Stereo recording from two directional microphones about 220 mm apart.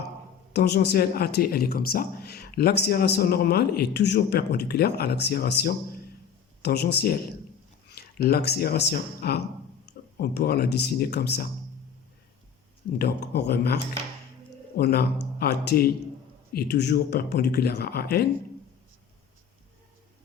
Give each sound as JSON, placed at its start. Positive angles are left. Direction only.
{"t": 0.5, "sound": "speech", "side_deg": 50}
{"t": 13.0, "sound": "speech", "side_deg": 50}